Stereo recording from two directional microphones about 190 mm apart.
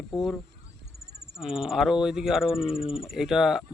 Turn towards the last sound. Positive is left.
turn(degrees=0)  # may be behind; listen again after turning